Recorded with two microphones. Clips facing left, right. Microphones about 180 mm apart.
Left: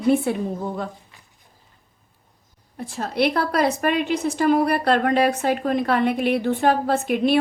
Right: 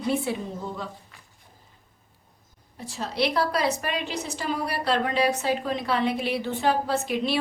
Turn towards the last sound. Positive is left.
turn(degrees=55)  # may be behind; listen again after turning